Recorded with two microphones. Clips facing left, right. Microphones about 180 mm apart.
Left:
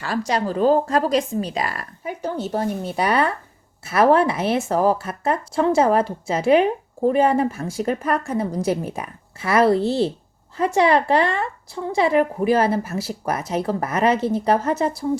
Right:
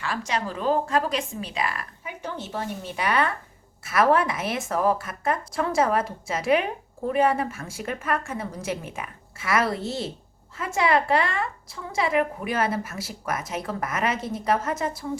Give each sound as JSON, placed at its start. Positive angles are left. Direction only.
{"t": 0.0, "sound": "a woman's voice", "side_deg": 40}